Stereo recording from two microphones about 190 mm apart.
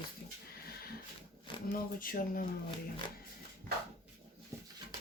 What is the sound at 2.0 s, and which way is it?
Speech, 50° left (ahead or behind).